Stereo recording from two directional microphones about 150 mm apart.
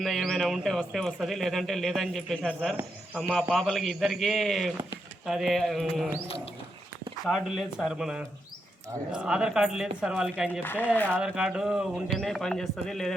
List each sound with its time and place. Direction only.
0.0 s speech: centre (ahead or behind)
6.2 s speech: 40° left (ahead or behind)
7.3 s speech: centre (ahead or behind)
10.6 s speech: 10° left (ahead or behind)
11.2 s speech: 5° right (ahead or behind)